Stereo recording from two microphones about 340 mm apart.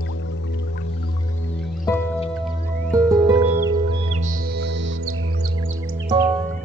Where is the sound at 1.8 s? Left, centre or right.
Centre.